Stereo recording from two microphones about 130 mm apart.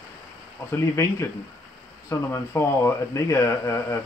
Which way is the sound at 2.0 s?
20° left (ahead or behind).